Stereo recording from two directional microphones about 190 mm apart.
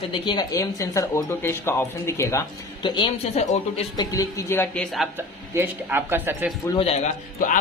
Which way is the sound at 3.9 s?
15° left (ahead or behind).